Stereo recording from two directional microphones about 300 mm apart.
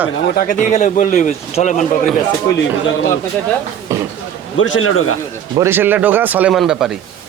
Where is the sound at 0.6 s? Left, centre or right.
Left.